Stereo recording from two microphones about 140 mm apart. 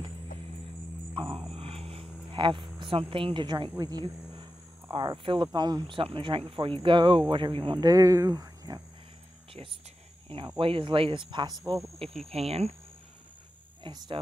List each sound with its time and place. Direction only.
1.1 s music: 35° right (ahead or behind)
1.5 s a sound: 45° right (ahead or behind)
2.8 s speech: 40° right (ahead or behind)
10.6 s speech: 40° right (ahead or behind)
12.3 s speech: 45° right (ahead or behind)
13.8 s speech: 35° right (ahead or behind)